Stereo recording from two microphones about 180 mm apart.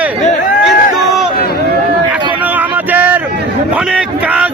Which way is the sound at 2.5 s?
10° right (ahead or behind).